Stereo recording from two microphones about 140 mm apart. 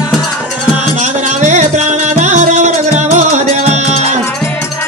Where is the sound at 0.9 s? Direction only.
60° right (ahead or behind).